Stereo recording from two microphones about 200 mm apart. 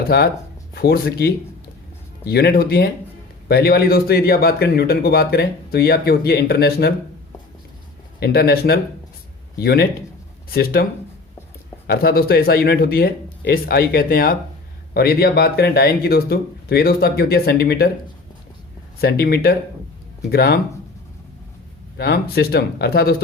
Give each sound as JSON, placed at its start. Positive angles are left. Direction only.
{"t": 0.1, "sound": "speech", "side_deg": 55}
{"t": 8.2, "sound": "speech", "side_deg": 50}
{"t": 11.9, "sound": "speech", "side_deg": 50}
{"t": 18.9, "sound": "speech", "side_deg": 50}
{"t": 21.9, "sound": "speech", "side_deg": 55}